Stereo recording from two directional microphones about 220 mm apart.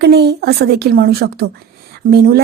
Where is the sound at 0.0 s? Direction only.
50° right (ahead or behind).